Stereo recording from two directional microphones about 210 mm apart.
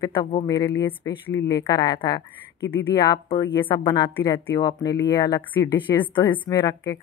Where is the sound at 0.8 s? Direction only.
15° left (ahead or behind).